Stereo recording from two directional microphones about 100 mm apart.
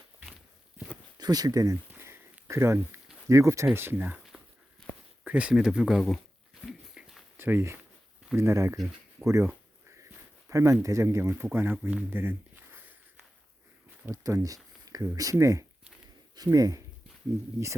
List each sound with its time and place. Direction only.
1.2 s speech: 40° right (ahead or behind)
1.9 s a sound: 25° right (ahead or behind)
3.2 s speech: 30° right (ahead or behind)
3.8 s speech: 20° right (ahead or behind)
5.2 s speech: 15° right (ahead or behind)
6.7 s a sound: 5° right (ahead or behind)
7.3 s speech: 25° right (ahead or behind)
10.5 s speech: 30° right (ahead or behind)
11.5 s a sound: 20° right (ahead or behind)
14.1 s speech: 35° right (ahead or behind)